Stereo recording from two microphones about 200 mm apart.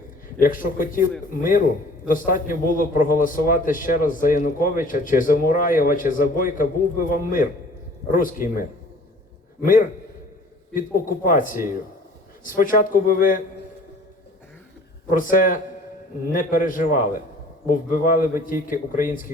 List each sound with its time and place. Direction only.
0.3 s a man's voice: 45° left (ahead or behind)
15.1 s a man's voice: 40° left (ahead or behind)